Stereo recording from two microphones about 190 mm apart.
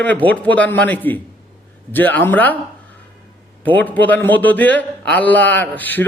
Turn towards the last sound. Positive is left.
turn(degrees=10)  # may be behind; listen again after turning